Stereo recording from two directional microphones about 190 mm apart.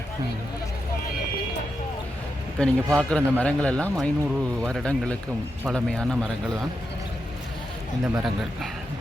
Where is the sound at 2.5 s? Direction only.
5° left (ahead or behind).